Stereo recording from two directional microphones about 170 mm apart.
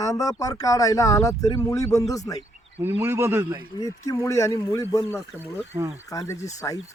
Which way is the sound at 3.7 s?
20° left (ahead or behind).